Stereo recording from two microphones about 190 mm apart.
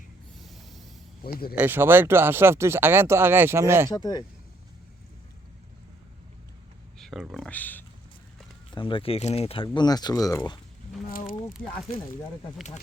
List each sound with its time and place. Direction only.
0.3 s snort: centre (ahead or behind)
1.2 s speech: 50° left (ahead or behind)
1.5 s speech: 10° right (ahead or behind)
3.8 s speech: 20° left (ahead or behind)
7.0 s speech: centre (ahead or behind)
8.7 s speech: 25° left (ahead or behind)